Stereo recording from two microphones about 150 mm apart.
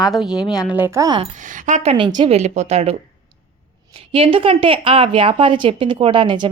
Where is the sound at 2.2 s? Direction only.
50° right (ahead or behind).